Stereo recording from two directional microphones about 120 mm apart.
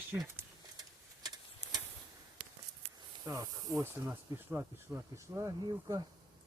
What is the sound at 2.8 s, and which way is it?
Snake, 25° right (ahead or behind).